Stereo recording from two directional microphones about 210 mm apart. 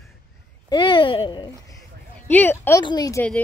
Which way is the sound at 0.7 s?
25° left (ahead or behind).